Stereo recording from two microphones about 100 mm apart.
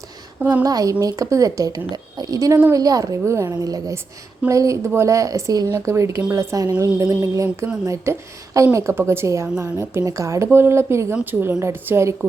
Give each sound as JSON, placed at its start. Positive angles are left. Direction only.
{"t": 0.3, "sound": "a woman's voice", "side_deg": -15}
{"t": 0.6, "sound": "a woman's voice", "side_deg": -35}